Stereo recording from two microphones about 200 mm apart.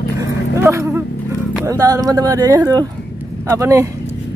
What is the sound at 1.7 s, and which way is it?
Speech, 15° right (ahead or behind).